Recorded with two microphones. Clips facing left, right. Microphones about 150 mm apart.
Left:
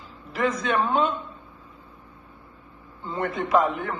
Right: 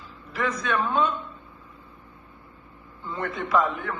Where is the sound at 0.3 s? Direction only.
25° left (ahead or behind).